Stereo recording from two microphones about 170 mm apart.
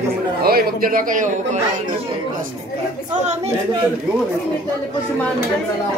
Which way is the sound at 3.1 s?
40° right (ahead or behind).